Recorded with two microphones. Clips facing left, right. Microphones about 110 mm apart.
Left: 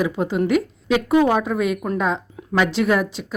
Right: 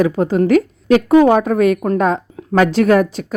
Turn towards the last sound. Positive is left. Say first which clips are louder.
# right 7 dB
turn(degrees=-45)  # may be behind; listen again after turning